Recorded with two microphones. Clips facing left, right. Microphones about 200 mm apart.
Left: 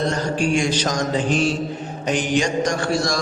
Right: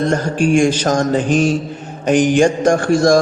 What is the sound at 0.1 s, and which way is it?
A man's voice, 50° right (ahead or behind).